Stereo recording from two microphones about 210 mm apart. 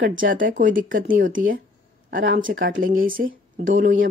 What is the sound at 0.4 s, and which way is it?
Speech, 40° right (ahead or behind).